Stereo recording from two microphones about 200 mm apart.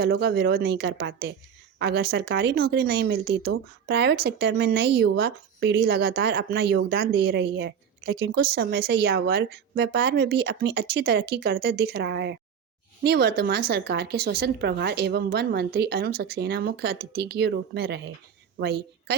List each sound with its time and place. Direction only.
0.0 s a woman's voice: 50° right (ahead or behind)